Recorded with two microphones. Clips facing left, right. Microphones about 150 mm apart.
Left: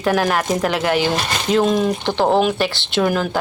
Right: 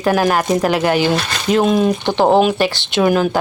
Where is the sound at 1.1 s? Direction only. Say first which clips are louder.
Right 2 dB; 15° left (ahead or behind).